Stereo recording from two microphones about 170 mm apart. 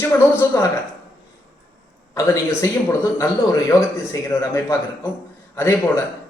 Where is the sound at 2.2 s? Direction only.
20° left (ahead or behind).